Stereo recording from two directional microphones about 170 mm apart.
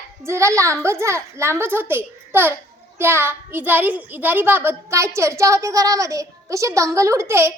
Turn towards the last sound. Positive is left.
turn(degrees=-15)  # may be behind; listen again after turning